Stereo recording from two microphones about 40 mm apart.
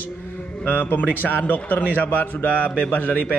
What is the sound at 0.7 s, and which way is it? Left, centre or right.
A man's voice, left.